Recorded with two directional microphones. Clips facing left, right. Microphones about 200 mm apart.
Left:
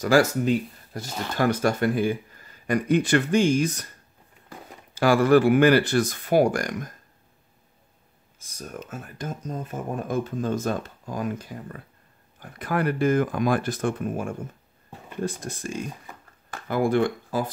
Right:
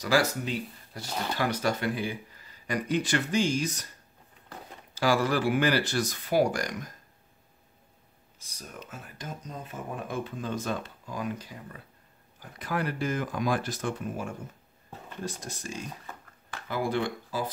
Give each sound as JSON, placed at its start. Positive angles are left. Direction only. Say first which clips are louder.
{"t": 0.0, "sound": "speech", "louder": "left 7 dB", "side_deg": 50}
{"t": 4.9, "sound": "speech", "louder": "left 8 dB", "side_deg": 55}
{"t": 8.4, "sound": "speech", "louder": "left 7 dB", "side_deg": 45}
{"t": 16.1, "sound": "a sound", "louder": "even", "side_deg": 15}
{"t": 16.4, "sound": "speech", "louder": "left 7 dB", "side_deg": 50}